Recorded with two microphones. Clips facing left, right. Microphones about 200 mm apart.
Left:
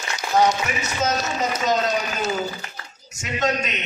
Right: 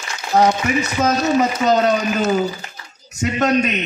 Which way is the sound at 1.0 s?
65° right (ahead or behind).